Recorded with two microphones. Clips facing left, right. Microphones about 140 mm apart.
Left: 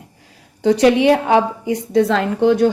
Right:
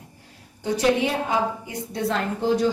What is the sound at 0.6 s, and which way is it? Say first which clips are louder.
A woman's voice: left 9 dB; 75° left (ahead or behind).